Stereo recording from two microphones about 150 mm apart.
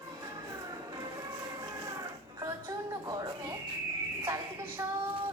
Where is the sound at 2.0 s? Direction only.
25° right (ahead or behind).